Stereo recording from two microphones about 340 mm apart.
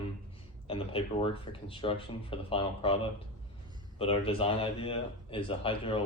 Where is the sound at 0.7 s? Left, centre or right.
Centre.